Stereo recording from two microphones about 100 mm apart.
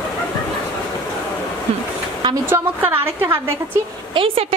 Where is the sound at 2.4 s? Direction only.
20° right (ahead or behind).